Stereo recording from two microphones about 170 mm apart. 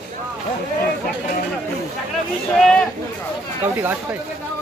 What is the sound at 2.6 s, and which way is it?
Speech, 5° left (ahead or behind).